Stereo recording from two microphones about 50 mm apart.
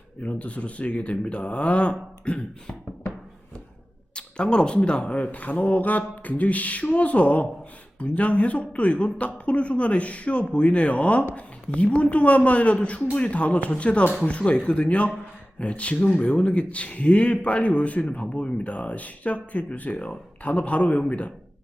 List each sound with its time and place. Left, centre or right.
0.2 s speech: left
4.1 s speech: centre